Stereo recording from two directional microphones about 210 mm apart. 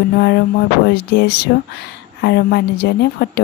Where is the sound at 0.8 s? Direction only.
50° left (ahead or behind).